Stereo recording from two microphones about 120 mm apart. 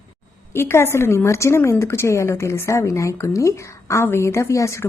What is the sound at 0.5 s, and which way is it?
A woman's voice, 20° left (ahead or behind).